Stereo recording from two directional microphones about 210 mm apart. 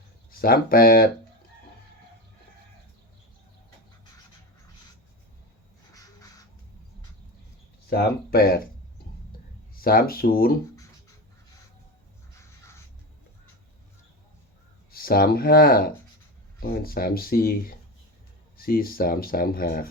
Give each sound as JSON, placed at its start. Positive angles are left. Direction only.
{"t": 0.3, "sound": "speech", "side_deg": 45}
{"t": 5.9, "sound": "crow", "side_deg": 15}
{"t": 7.9, "sound": "speech", "side_deg": 45}
{"t": 9.8, "sound": "speech", "side_deg": 45}
{"t": 14.9, "sound": "speech", "side_deg": 45}